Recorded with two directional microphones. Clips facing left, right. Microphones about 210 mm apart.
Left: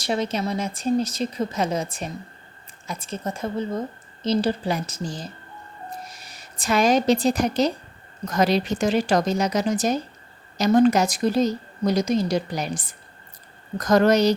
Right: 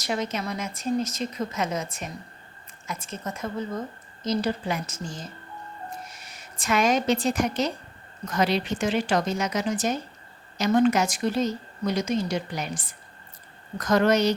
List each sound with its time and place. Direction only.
0.0 s a woman's voice: 30° left (ahead or behind)